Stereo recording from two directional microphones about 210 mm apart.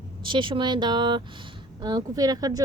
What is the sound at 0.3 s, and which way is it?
A woman's voice, 25° right (ahead or behind).